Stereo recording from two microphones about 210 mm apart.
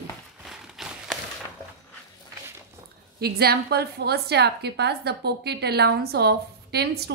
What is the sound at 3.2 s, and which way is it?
A woman's voice, 50° right (ahead or behind).